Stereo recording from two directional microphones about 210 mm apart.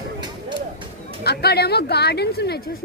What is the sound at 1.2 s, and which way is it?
Fowl, 50° left (ahead or behind).